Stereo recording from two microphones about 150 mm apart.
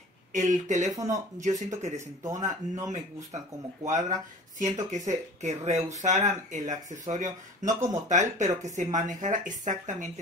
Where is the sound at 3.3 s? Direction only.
50° right (ahead or behind).